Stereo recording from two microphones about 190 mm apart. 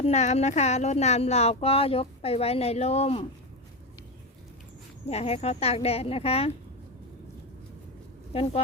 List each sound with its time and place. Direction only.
0.0 s speech: 35° left (ahead or behind)
5.0 s speech: 35° left (ahead or behind)
8.3 s speech: 30° left (ahead or behind)